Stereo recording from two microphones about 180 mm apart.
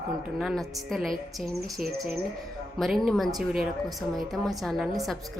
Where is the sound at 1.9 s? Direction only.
60° right (ahead or behind).